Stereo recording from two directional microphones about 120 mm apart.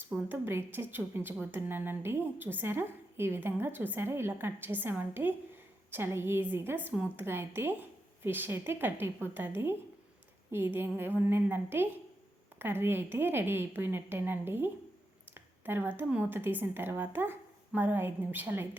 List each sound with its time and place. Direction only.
0.3 s a woman's voice: 20° right (ahead or behind)